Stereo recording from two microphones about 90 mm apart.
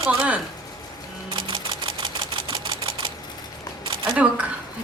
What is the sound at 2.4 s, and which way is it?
Camera, 70° right (ahead or behind).